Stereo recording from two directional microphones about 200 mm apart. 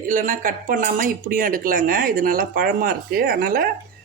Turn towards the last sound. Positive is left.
turn(degrees=-45)  # may be behind; listen again after turning